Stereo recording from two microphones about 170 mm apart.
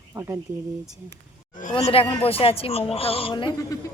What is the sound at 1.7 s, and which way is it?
Speech, 35° left (ahead or behind).